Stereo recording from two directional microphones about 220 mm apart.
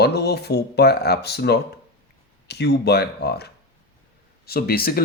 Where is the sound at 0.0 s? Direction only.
45° left (ahead or behind).